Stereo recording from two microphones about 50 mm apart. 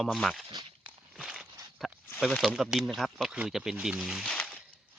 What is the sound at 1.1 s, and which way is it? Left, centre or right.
Walk, centre.